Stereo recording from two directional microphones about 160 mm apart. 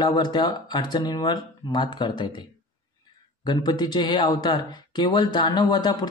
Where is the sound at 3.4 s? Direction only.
25° left (ahead or behind).